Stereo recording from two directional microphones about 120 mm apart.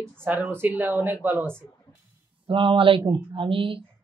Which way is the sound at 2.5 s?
45° right (ahead or behind).